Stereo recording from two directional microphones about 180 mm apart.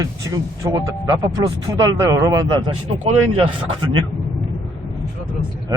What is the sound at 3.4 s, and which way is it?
Speech, 30° right (ahead or behind).